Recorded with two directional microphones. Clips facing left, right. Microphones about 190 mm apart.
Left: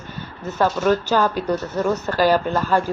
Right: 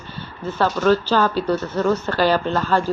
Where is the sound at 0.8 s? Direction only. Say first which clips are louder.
Right 3 dB; 20° left (ahead or behind).